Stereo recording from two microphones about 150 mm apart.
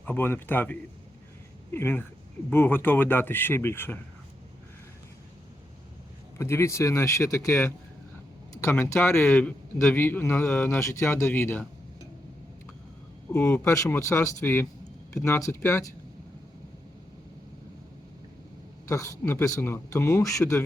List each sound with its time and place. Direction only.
0.0 s speech: 10° left (ahead or behind)
6.4 s speech: 20° left (ahead or behind)
13.3 s speech: 15° left (ahead or behind)
18.9 s speech: 20° left (ahead or behind)